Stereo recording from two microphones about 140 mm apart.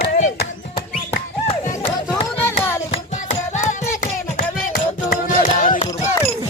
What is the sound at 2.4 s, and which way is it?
Music, 15° left (ahead or behind).